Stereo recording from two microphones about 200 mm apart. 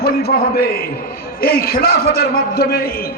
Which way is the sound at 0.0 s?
50° left (ahead or behind).